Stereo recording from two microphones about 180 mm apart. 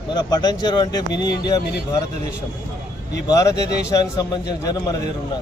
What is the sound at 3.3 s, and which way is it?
Speech, 20° left (ahead or behind).